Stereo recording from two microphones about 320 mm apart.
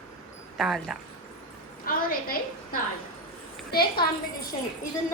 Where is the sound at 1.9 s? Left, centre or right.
Left.